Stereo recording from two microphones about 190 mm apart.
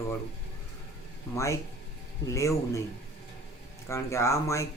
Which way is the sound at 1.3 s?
15° left (ahead or behind).